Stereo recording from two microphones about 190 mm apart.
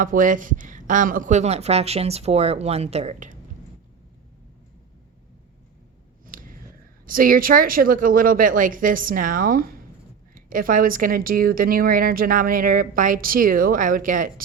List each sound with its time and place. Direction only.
0.0 s speech: 45° right (ahead or behind)
6.2 s a sound: 45° right (ahead or behind)
7.0 s a woman's voice: 45° right (ahead or behind)